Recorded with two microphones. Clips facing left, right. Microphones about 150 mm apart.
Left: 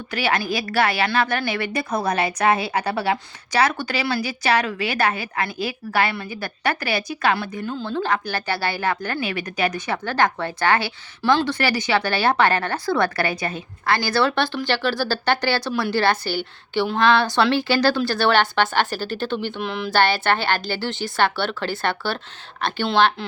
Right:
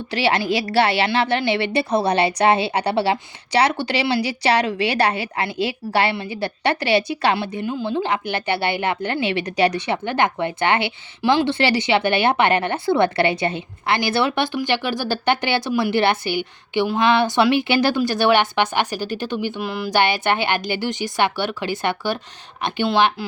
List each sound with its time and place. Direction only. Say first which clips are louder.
0.1 s a woman's voice: right 3 dB; 30° right (ahead or behind)
7.6 s a woman's voice: right 3 dB; 15° right (ahead or behind)
11.4 s a woman's voice: right 3 dB; 25° right (ahead or behind); by 19.9 s 5° right (ahead or behind)
19.9 s a woman's voice: even; 15° right (ahead or behind)